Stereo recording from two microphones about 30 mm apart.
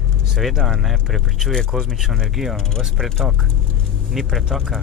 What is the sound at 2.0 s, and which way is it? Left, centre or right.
Speech, centre.